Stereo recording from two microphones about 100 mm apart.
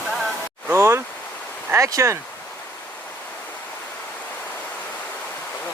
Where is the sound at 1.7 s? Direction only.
30° right (ahead or behind).